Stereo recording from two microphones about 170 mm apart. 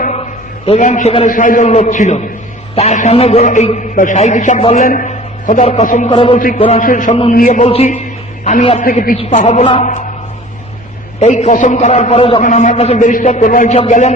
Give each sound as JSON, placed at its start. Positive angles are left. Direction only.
{"t": 0.7, "sound": "a man's voice", "side_deg": 45}
{"t": 4.9, "sound": "a man's voice", "side_deg": 55}
{"t": 6.1, "sound": "a man's voice", "side_deg": 30}
{"t": 6.3, "sound": "a man's voice", "side_deg": 50}
{"t": 8.8, "sound": "a man's voice", "side_deg": 55}
{"t": 9.1, "sound": "a man's voice", "side_deg": 40}
{"t": 11.2, "sound": "a man's voice", "side_deg": 45}
{"t": 12.4, "sound": "a man's voice", "side_deg": 45}